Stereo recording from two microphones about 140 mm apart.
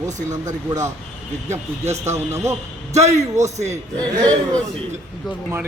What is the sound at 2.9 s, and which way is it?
Speech, 55° right (ahead or behind).